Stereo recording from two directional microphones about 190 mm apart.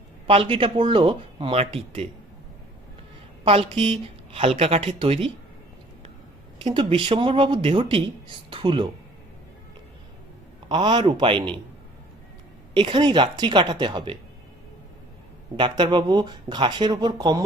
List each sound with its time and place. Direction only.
0.3 s speech: 30° right (ahead or behind)
3.4 s a woman's voice: 30° right (ahead or behind)
6.6 s speech: 25° right (ahead or behind)
8.4 s a sound: 25° right (ahead or behind)
10.7 s speech: 25° right (ahead or behind)
12.7 s speech: 25° right (ahead or behind)
15.5 s speech: 25° right (ahead or behind)